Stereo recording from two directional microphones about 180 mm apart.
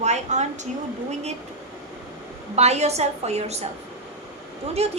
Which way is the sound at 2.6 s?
35° right (ahead or behind).